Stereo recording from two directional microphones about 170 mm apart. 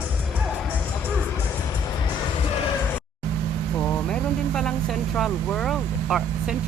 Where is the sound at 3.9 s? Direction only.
5° left (ahead or behind).